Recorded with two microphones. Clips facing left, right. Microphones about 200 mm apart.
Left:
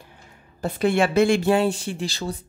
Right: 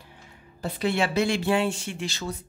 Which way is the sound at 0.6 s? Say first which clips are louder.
Left 5 dB; 50° left (ahead or behind).